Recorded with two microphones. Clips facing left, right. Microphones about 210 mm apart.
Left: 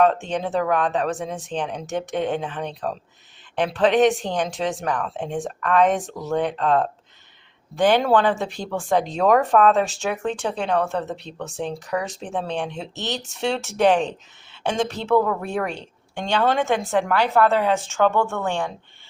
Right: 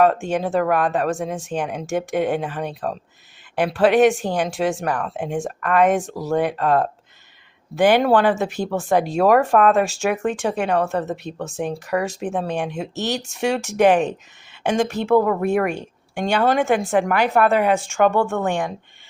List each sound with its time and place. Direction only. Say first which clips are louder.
0.0 s a woman's voice: right 2 dB; 5° right (ahead or behind)